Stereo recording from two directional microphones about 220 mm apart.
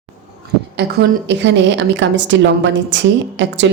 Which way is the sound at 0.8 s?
50° right (ahead or behind).